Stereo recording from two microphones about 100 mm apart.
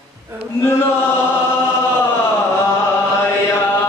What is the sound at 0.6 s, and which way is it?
Speech, 25° left (ahead or behind).